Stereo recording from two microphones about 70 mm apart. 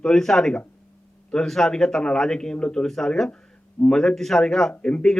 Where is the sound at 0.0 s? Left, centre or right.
Centre.